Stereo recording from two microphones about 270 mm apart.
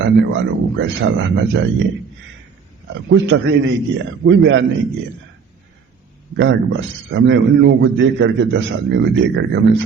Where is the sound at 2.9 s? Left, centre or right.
Right.